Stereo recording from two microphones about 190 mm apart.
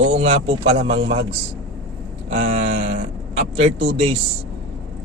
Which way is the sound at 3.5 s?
30° right (ahead or behind).